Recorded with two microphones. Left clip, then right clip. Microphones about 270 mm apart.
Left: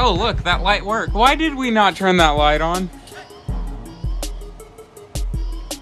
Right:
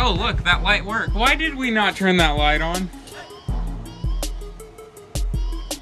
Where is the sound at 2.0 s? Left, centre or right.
Right.